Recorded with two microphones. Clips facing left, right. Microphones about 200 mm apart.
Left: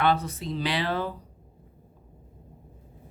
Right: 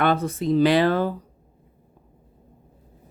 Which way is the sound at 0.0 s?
50° right (ahead or behind).